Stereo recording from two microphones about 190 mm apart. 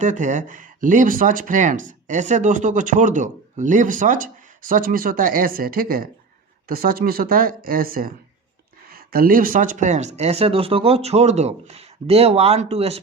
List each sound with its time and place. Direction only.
0.0 s speech: 40° right (ahead or behind)